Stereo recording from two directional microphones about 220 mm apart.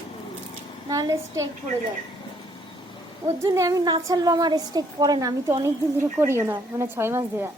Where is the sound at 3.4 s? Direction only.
15° right (ahead or behind).